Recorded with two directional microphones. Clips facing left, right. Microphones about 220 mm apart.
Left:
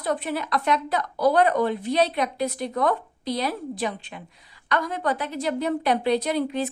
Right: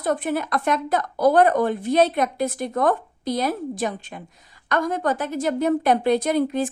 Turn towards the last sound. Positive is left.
turn(degrees=-45)  # may be behind; listen again after turning